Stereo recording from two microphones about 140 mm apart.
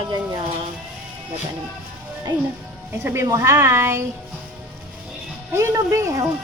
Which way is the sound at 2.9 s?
15° right (ahead or behind).